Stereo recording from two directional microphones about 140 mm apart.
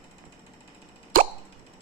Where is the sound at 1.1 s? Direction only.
80° right.